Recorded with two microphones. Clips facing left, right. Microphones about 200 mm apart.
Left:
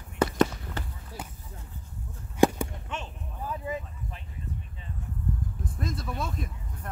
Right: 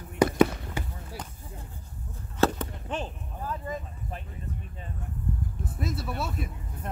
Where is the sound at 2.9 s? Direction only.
35° right (ahead or behind).